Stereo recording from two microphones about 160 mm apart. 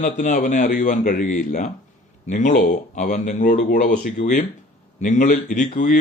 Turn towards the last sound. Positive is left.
turn(degrees=55)  # may be behind; listen again after turning